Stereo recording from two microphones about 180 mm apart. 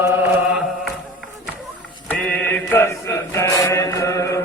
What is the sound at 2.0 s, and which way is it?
Mantra, 10° left (ahead or behind).